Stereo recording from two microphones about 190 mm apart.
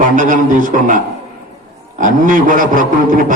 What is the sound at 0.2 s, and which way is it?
A man's voice, 45° right (ahead or behind).